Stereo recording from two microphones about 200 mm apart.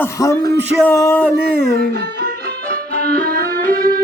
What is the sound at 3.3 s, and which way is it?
Music, 45° right (ahead or behind).